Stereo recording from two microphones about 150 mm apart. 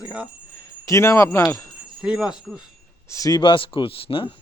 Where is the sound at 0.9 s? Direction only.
20° left (ahead or behind).